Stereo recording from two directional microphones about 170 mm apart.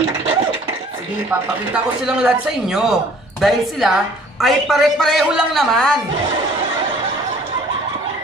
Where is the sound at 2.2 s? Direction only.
5° right (ahead or behind).